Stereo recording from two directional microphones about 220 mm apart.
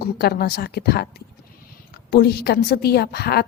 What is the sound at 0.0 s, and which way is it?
A woman's voice, 45° left (ahead or behind).